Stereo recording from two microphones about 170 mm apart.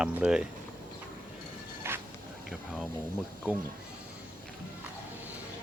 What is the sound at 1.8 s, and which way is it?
Dog, 15° right (ahead or behind).